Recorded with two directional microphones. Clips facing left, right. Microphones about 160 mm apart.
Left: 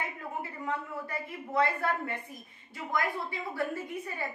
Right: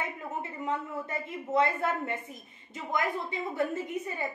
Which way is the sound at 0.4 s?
20° right (ahead or behind).